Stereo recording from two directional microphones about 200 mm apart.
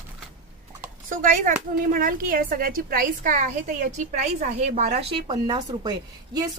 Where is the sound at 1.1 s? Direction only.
40° right (ahead or behind).